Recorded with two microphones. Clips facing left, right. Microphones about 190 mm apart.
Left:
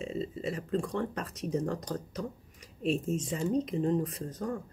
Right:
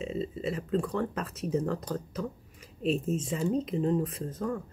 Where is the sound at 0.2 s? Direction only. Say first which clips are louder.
Right 2 dB; 35° right (ahead or behind).